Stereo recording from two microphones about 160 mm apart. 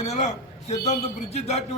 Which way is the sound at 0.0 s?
45° left (ahead or behind).